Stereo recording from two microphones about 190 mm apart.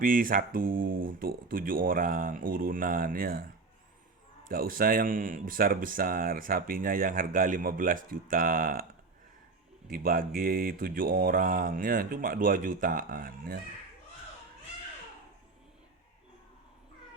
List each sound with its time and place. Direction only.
0.0 s speech: 45° right (ahead or behind)
4.4 s speech: 50° right (ahead or behind)